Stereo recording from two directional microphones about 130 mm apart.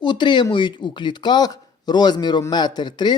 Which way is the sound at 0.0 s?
35° left (ahead or behind).